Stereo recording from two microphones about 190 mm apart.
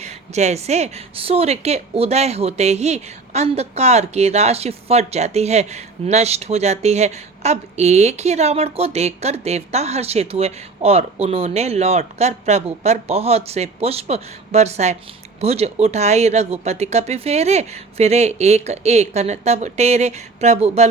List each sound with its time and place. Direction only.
0.0 s a woman's voice: 35° right (ahead or behind)